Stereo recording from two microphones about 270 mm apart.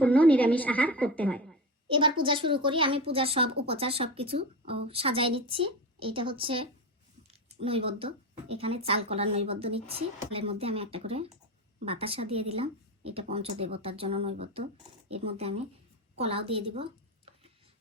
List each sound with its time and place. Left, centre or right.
0.0 s a woman's voice: centre
1.9 s a woman's voice: centre
16.1 s a sound: right